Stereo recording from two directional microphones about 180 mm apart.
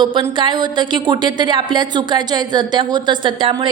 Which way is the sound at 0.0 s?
25° right (ahead or behind).